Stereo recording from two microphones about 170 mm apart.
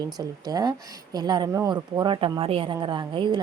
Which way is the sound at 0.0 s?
25° right (ahead or behind).